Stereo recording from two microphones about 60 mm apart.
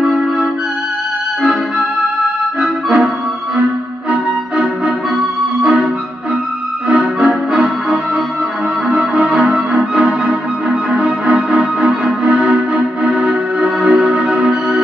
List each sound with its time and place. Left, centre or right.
0.0 s music: right
4.1 s music: right
6.9 s music: right